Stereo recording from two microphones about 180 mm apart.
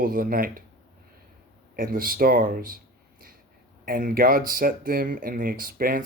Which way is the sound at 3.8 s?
50° right (ahead or behind).